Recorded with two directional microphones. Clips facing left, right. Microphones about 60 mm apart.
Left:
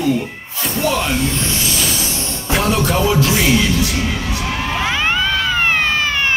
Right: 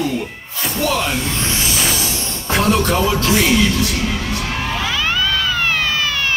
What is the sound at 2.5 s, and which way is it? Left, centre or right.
Music, centre.